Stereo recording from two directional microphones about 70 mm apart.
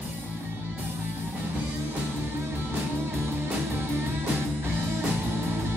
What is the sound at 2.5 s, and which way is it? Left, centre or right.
Music, right.